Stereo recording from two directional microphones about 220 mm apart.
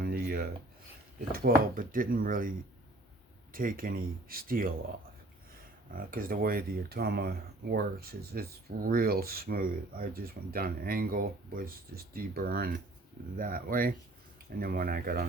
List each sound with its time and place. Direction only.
0.0 s a sound: 45° right (ahead or behind)
1.3 s speech: 40° right (ahead or behind)
5.9 s speech: 40° right (ahead or behind)